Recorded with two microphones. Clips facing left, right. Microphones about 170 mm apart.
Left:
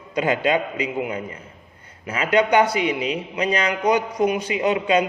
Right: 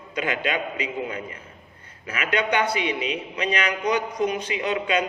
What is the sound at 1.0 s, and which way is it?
A man's voice, 25° left (ahead or behind).